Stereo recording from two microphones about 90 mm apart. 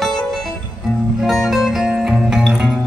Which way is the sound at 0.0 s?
5° left (ahead or behind).